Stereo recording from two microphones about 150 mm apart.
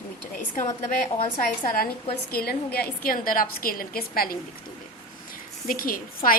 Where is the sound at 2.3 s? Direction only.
90° left.